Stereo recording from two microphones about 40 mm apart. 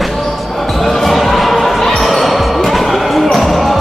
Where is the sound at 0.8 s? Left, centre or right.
Centre.